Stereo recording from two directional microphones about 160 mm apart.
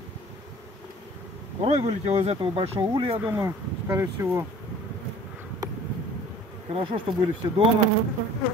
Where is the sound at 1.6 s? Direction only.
40° right (ahead or behind).